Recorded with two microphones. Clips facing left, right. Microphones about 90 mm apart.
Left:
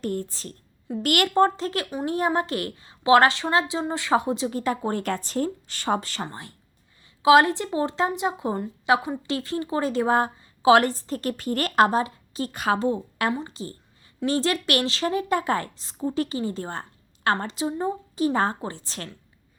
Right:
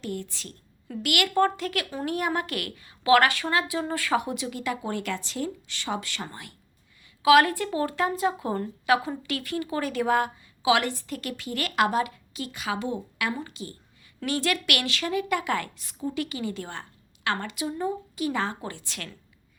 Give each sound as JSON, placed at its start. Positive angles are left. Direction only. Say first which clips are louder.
{"t": 0.0, "sound": "a woman's voice", "louder": "left 5 dB", "side_deg": 40}
{"t": 1.3, "sound": "a woman's voice", "louder": "left 2 dB", "side_deg": 30}
{"t": 1.9, "sound": "a woman's voice", "louder": "left 3 dB", "side_deg": 20}
{"t": 2.1, "sound": "a woman's voice", "louder": "left 5 dB", "side_deg": 30}